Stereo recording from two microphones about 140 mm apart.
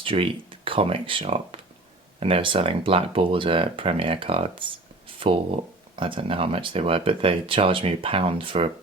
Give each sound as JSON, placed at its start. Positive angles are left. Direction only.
{"t": 0.0, "sound": "speech", "side_deg": -40}